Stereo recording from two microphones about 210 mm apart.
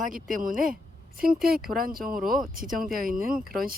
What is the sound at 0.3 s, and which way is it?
Speech, 40° right (ahead or behind).